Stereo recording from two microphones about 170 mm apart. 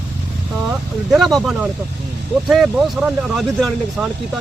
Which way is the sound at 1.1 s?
Centre (ahead or behind).